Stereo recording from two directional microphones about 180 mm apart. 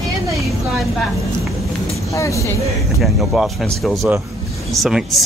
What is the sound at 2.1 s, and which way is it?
Speech, 15° left (ahead or behind).